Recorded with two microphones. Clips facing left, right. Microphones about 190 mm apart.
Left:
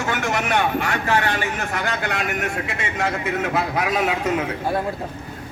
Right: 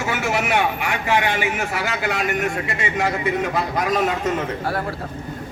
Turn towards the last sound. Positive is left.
turn(degrees=10)  # may be behind; listen again after turning